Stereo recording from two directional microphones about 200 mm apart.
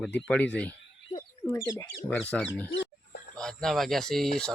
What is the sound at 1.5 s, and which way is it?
Speech, 15° left (ahead or behind).